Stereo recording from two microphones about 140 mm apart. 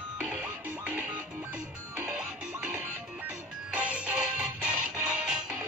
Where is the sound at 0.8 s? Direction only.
10° right (ahead or behind).